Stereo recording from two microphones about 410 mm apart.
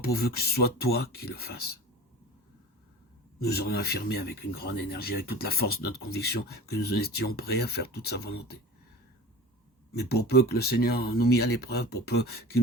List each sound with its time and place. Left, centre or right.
0.0 s speech: left
3.4 s speech: left
9.9 s speech: left